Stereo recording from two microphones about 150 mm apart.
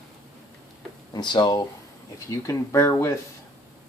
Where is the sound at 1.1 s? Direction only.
30° left (ahead or behind).